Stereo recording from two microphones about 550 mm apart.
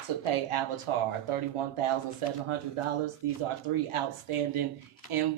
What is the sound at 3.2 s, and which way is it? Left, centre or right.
Speech, right.